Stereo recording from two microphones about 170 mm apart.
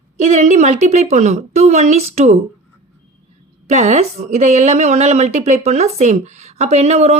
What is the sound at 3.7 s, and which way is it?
A woman's voice, 40° right (ahead or behind).